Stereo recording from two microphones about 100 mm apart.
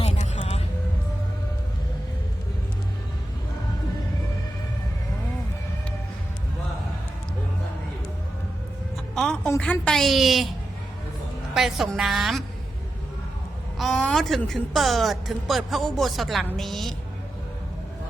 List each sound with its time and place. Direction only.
0.0 s vehicle: 90° left
9.1 s music: 5° left (ahead or behind)
9.6 s a woman's voice: 10° left (ahead or behind)
11.5 s a woman's voice: centre (ahead or behind)
13.7 s a woman's voice: 5° left (ahead or behind)